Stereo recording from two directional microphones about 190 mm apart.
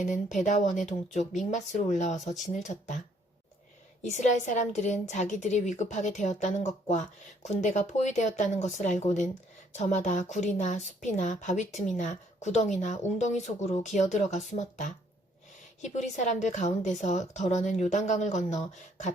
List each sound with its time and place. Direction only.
0.0 s a woman's voice: 40° left (ahead or behind)
4.2 s a woman's voice: 40° left (ahead or behind)